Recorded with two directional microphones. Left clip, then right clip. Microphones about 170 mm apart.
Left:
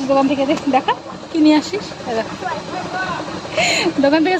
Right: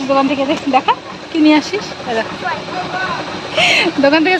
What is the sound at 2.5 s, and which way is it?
Speech, 20° left (ahead or behind).